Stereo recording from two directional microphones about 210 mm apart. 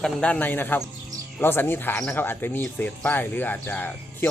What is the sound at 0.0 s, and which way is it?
Speech, 5° left (ahead or behind).